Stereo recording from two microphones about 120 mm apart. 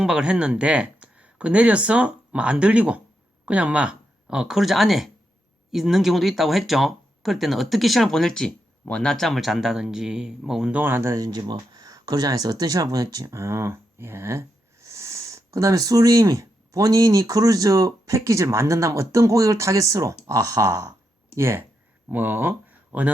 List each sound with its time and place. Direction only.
0.0 s speech: 5° right (ahead or behind)